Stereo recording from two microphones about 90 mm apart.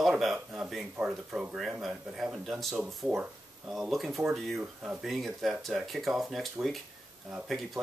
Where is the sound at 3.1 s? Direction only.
15° right (ahead or behind).